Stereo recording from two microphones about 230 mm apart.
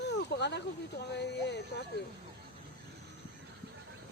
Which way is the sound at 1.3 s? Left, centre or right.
Left.